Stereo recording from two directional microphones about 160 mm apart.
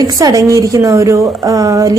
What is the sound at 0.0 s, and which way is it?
A woman's voice, 20° right (ahead or behind).